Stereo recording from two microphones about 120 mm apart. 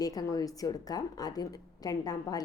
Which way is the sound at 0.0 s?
30° left (ahead or behind).